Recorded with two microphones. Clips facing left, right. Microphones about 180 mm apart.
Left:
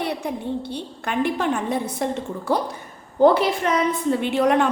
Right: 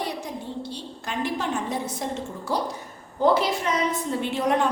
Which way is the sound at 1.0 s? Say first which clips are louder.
Left 5 dB; 60° left (ahead or behind).